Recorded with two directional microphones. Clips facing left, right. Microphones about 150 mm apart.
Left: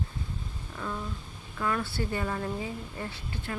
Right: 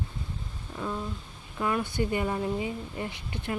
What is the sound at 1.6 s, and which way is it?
Speech, 15° right (ahead or behind).